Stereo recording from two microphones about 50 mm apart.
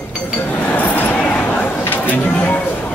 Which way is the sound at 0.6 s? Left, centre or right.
Left.